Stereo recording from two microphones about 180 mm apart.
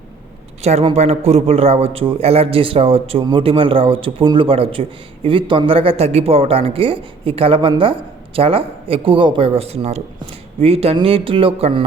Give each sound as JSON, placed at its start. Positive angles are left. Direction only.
{"t": 0.6, "sound": "speech", "side_deg": -35}